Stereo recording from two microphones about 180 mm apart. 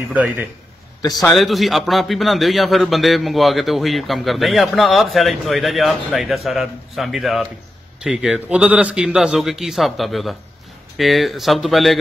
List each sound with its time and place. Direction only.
0.1 s a man's voice: 10° right (ahead or behind)
1.0 s a man's voice: 20° left (ahead or behind)
1.3 s a man's voice: centre (ahead or behind)